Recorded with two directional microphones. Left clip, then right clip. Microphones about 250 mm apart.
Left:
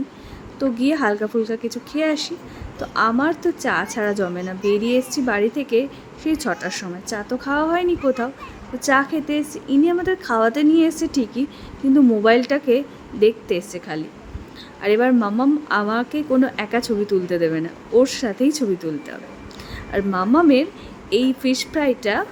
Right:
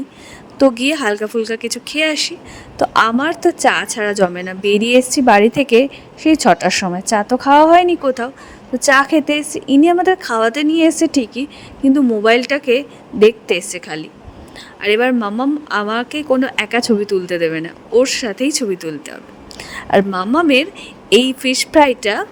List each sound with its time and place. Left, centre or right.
0.6 s a woman's voice: right